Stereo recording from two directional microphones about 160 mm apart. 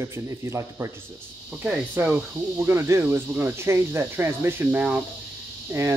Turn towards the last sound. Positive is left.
turn(degrees=-15)  # may be behind; listen again after turning